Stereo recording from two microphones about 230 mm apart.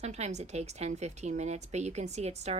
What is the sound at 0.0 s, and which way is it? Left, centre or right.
Speech, right.